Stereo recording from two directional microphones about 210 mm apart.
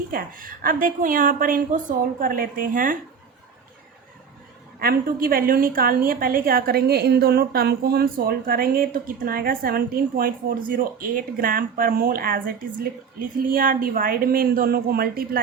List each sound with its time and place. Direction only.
0.1 s a woman's voice: 40° right (ahead or behind)
4.8 s a woman's voice: 45° right (ahead or behind)